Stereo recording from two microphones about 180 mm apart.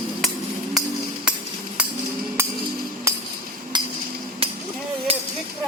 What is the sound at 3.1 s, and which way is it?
Hammer, 15° right (ahead or behind).